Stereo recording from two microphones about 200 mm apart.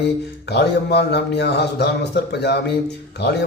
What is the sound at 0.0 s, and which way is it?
Speech, 55° left (ahead or behind).